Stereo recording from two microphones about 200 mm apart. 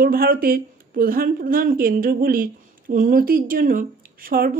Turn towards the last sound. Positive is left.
turn(degrees=-45)  # may be behind; listen again after turning